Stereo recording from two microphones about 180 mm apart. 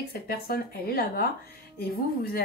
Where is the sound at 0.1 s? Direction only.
60° left (ahead or behind).